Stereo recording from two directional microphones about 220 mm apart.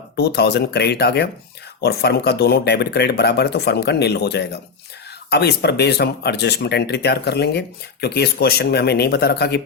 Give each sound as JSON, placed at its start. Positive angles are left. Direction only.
{"t": 0.2, "sound": "speech", "side_deg": 50}